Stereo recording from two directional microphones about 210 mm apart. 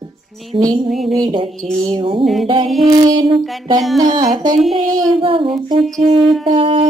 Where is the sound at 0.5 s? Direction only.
15° right (ahead or behind).